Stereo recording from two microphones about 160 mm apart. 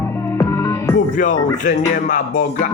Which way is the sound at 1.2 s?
55° left (ahead or behind).